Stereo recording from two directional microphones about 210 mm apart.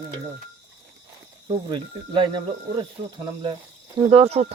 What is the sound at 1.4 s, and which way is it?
Speech, 20° right (ahead or behind).